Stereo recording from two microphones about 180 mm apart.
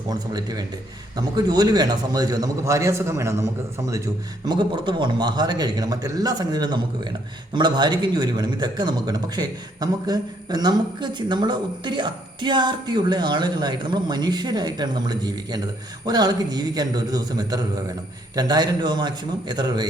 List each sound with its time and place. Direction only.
0.1 s speech: 20° right (ahead or behind)